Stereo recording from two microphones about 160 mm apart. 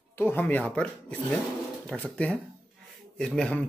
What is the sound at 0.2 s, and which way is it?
Speech, 15° left (ahead or behind).